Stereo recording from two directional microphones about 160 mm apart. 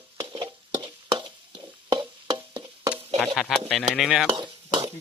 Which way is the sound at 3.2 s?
Centre (ahead or behind).